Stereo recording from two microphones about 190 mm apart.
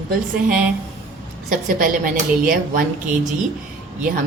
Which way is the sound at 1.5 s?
45° right (ahead or behind).